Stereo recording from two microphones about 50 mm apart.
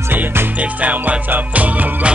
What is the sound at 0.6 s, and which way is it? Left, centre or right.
Music, right.